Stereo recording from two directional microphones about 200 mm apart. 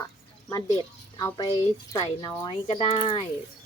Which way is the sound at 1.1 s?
20° left (ahead or behind).